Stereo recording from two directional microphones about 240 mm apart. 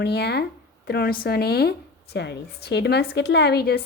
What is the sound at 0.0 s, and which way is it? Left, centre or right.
Speech, left.